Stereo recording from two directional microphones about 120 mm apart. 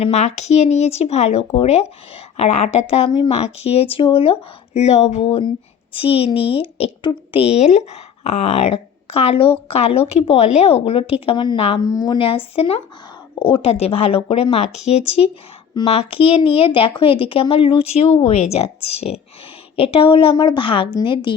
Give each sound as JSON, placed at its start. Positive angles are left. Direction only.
{"t": 0.0, "sound": "speech", "side_deg": 70}
{"t": 7.0, "sound": "a woman's voice", "side_deg": 40}
{"t": 7.4, "sound": "speech", "side_deg": 65}
{"t": 11.8, "sound": "a woman's voice", "side_deg": 35}
{"t": 12.2, "sound": "speech", "side_deg": 50}